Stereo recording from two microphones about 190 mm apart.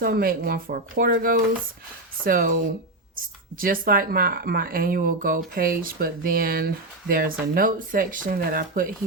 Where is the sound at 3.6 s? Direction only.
50° right (ahead or behind).